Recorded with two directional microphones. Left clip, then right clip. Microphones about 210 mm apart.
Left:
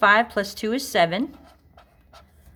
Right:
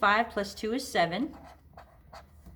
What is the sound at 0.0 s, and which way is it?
Speech, 45° left (ahead or behind).